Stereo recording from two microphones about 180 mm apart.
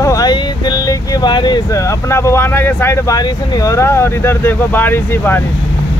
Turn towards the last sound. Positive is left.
turn(degrees=10)  # may be behind; listen again after turning